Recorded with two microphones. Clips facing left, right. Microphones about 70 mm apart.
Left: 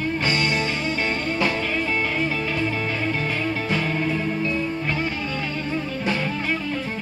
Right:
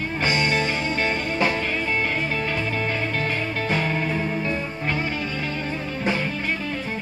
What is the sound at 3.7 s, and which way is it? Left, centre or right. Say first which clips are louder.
Music: right 2 dB; right.